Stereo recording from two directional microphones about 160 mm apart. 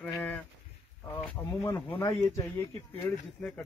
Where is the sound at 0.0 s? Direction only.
10° left (ahead or behind).